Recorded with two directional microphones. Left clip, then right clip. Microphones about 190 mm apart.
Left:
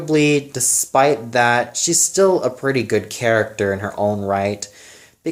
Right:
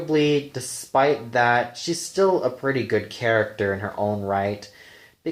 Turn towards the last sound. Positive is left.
turn(degrees=25)  # may be behind; listen again after turning